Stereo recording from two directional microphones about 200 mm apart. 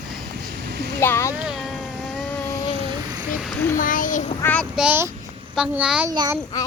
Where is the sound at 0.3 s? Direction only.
55° right (ahead or behind).